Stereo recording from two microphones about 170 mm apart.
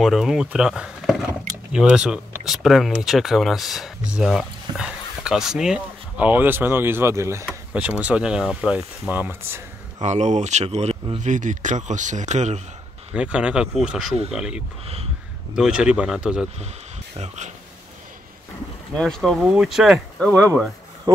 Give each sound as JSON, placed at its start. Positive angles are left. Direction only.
{"t": 0.0, "sound": "speech", "side_deg": 0}
{"t": 10.0, "sound": "speech", "side_deg": -40}
{"t": 13.1, "sound": "speech", "side_deg": -5}
{"t": 18.9, "sound": "speech", "side_deg": 0}